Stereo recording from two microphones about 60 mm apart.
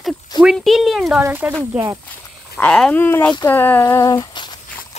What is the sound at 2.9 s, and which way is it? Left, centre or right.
Speech, left.